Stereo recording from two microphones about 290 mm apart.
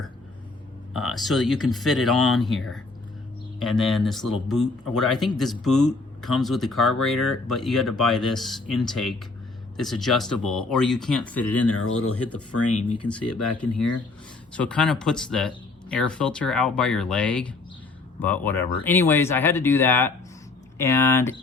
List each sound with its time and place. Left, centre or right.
0.9 s speech: centre
11.7 s speech: left
14.5 s speech: centre